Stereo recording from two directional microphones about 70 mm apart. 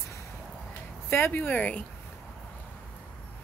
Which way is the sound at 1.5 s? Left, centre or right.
Centre.